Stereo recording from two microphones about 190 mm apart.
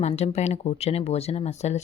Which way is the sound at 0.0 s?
35° left (ahead or behind).